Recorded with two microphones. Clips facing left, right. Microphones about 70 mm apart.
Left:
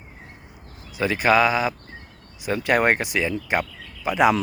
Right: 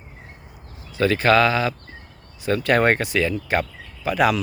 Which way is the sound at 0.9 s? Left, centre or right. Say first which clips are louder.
Right 2 dB; centre.